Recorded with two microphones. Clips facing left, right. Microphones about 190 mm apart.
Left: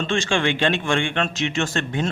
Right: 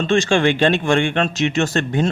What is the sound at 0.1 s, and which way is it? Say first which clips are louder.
A man's voice: right 7 dB; 40° right (ahead or behind).